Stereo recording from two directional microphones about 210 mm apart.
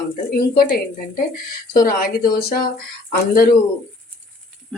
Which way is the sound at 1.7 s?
45° left (ahead or behind).